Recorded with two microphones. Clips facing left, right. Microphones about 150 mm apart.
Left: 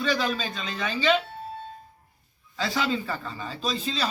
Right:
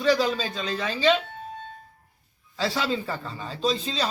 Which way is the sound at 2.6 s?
30° right (ahead or behind).